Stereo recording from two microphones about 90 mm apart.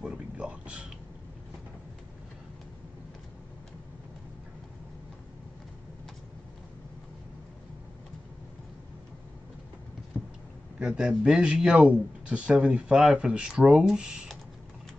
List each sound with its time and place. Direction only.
0.0 s a sound: 10° right (ahead or behind)
10.1 s vehicle: 15° left (ahead or behind)
10.8 s speech: 10° right (ahead or behind)